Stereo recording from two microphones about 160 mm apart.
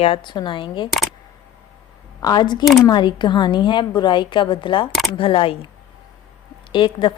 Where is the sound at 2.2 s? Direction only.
25° left (ahead or behind).